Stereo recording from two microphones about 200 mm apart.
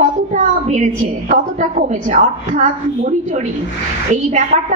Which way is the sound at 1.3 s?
35° right (ahead or behind).